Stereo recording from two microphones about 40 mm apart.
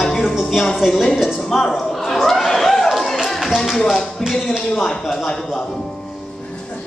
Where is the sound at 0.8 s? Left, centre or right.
Centre.